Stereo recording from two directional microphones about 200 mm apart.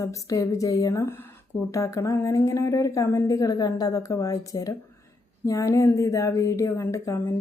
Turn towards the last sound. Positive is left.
turn(degrees=15)  # may be behind; listen again after turning